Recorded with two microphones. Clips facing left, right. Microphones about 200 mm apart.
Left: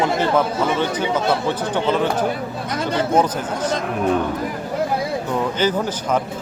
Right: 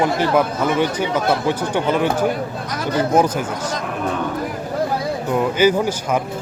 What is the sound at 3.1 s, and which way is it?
Speech, 10° right (ahead or behind).